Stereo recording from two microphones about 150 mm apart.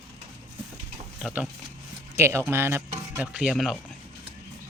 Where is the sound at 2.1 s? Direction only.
20° right (ahead or behind).